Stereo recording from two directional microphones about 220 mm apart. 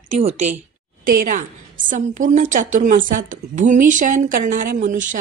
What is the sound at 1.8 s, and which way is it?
A woman's voice, 35° right (ahead or behind).